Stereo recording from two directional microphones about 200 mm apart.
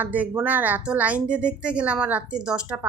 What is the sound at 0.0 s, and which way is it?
Speech, 10° right (ahead or behind).